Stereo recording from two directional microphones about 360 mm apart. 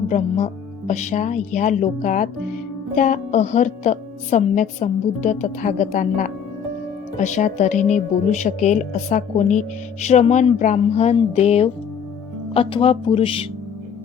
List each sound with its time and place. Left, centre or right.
0.1 s speech: centre